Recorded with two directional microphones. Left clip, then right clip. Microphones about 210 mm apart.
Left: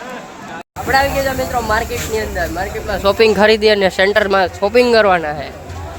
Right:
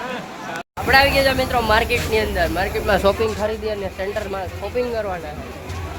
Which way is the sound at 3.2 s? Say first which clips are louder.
Left 12 dB; 45° left (ahead or behind).